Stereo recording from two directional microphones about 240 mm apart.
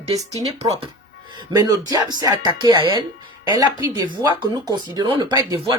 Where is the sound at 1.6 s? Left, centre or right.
Centre.